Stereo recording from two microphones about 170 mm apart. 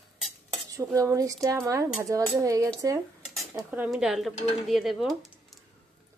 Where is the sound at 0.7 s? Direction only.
20° right (ahead or behind).